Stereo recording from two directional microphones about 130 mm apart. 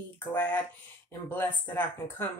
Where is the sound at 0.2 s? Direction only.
15° left (ahead or behind).